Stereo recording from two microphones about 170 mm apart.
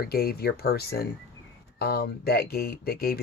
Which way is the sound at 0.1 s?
65° left (ahead or behind).